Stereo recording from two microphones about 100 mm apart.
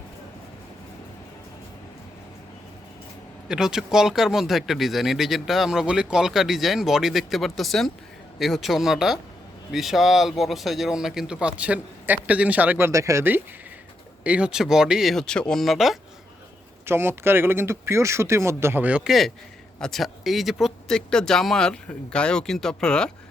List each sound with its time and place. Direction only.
3.5 s speech: 5° right (ahead or behind)
12.9 s speech: 30° right (ahead or behind)
14.3 s speech: 10° right (ahead or behind)
16.8 s speech: 25° right (ahead or behind)
19.8 s speech: centre (ahead or behind)